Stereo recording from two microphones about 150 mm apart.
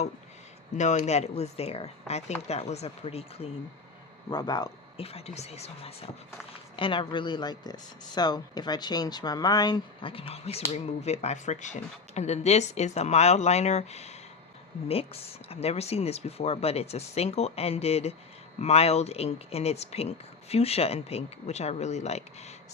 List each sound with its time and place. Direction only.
0.9 s speech: 45° left (ahead or behind)
4.3 s speech: 30° left (ahead or behind)
5.0 s speech: 45° left (ahead or behind)